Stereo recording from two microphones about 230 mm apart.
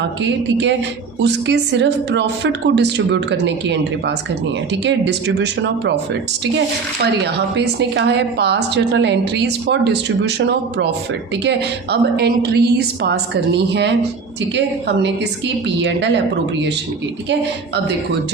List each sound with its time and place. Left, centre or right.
0.2 s a woman's voice: right
7.3 s a woman's voice: right
15.6 s a woman's voice: right